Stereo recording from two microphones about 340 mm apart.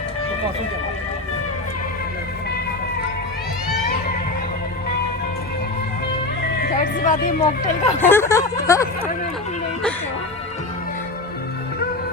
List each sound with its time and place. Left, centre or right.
6.6 s speech: left
7.9 s speech: centre